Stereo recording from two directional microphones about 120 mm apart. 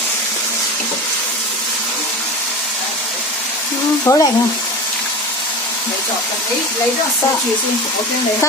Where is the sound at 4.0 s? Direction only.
25° left (ahead or behind).